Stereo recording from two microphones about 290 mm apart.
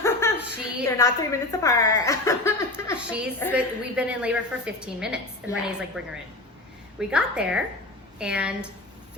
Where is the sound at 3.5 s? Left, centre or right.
Centre.